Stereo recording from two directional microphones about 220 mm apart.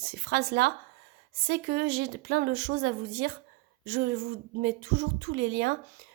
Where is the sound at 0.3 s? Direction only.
50° right (ahead or behind).